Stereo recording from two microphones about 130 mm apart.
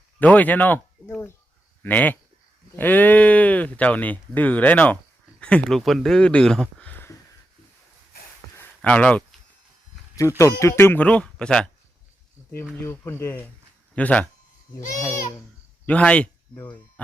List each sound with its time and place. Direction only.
0.2 s speech: 10° left (ahead or behind)
8.5 s a sound: 10° left (ahead or behind)
10.2 s speech: 25° left (ahead or behind); by 11.7 s 5° left (ahead or behind)
12.4 s cricket: centre (ahead or behind)
12.8 s speech: 20° left (ahead or behind)
15.9 s speech: 10° left (ahead or behind)